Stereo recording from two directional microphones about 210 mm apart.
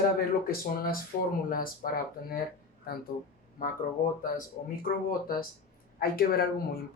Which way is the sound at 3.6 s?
40° left (ahead or behind).